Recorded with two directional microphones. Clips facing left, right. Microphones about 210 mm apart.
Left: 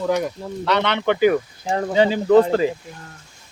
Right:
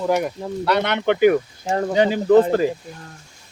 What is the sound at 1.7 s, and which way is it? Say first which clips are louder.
Speech: even; 40° right (ahead or behind).